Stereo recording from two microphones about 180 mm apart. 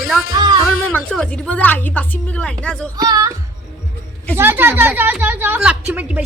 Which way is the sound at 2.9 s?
20° right (ahead or behind).